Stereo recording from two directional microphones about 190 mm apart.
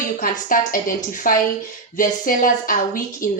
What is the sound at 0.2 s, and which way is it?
Speech, 45° left (ahead or behind).